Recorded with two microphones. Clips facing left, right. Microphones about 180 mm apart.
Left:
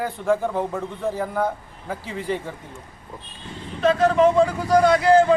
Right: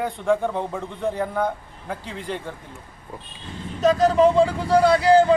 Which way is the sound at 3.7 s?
40° right (ahead or behind).